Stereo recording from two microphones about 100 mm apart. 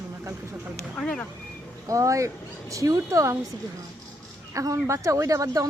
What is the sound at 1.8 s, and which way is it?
Speech, 35° right (ahead or behind).